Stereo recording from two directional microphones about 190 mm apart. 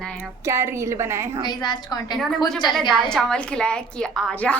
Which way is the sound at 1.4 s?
20° left (ahead or behind).